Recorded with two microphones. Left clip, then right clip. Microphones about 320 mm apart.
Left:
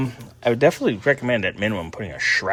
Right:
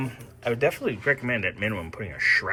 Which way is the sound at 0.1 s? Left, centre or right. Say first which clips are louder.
Left 7 dB; left.